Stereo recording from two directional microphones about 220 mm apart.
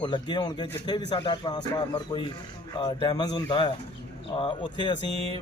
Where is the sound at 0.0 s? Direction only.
20° left (ahead or behind).